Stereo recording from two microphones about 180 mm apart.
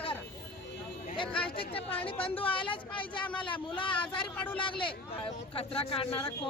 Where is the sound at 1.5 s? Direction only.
30° left (ahead or behind).